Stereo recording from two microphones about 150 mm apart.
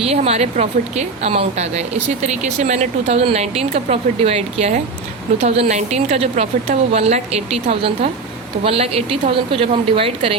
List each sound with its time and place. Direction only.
0.0 s speech: 45° right (ahead or behind)